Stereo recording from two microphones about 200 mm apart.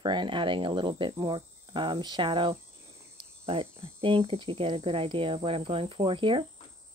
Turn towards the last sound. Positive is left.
turn(degrees=-25)  # may be behind; listen again after turning